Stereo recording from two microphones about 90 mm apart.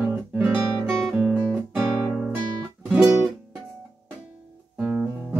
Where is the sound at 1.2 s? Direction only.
10° right (ahead or behind).